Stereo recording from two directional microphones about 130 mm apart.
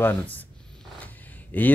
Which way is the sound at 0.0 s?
15° left (ahead or behind).